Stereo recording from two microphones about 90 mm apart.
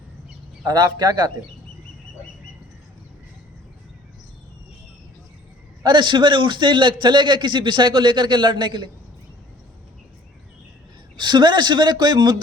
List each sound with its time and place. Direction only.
0.6 s speech: 45° right (ahead or behind)
5.8 s a man's voice: 60° right (ahead or behind)
11.2 s speech: 55° right (ahead or behind)